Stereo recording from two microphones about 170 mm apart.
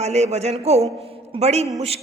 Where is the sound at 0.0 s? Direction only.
40° right (ahead or behind).